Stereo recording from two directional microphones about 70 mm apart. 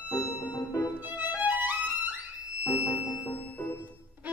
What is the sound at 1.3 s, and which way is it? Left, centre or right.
Violin, right.